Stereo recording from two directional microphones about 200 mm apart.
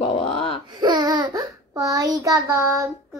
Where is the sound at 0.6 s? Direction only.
20° right (ahead or behind).